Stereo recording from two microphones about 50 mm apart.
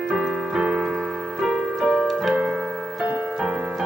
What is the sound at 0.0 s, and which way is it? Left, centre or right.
Keyboard, centre.